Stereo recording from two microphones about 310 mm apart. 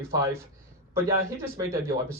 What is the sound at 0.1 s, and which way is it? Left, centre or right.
Speech, centre.